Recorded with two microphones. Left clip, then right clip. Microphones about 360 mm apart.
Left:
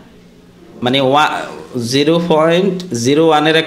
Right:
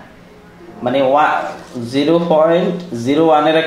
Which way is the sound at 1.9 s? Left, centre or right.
Left.